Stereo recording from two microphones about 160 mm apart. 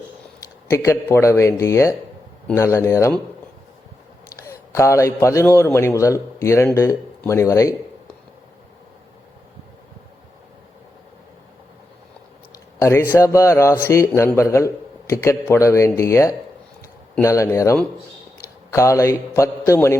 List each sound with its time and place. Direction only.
0.3 s a man's voice: 15° left (ahead or behind)
4.4 s a man's voice: 20° left (ahead or behind)
12.8 s a man's voice: 15° left (ahead or behind)